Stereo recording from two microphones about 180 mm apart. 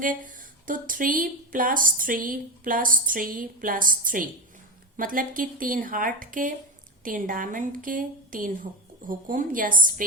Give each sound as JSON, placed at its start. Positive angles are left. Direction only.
{"t": 0.0, "sound": "a woman's voice", "side_deg": -50}